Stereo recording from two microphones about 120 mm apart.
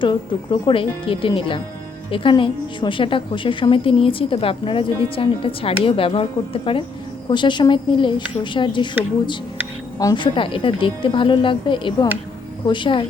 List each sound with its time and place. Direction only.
0.0 s a woman's voice: 40° left (ahead or behind)